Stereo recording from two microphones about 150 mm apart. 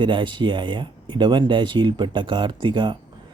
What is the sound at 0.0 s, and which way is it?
Speech, 35° right (ahead or behind).